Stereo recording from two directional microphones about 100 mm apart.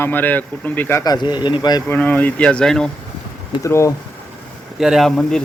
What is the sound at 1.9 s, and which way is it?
Speech, 15° left (ahead or behind).